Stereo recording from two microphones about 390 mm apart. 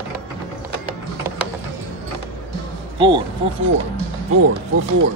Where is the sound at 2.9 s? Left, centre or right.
Centre.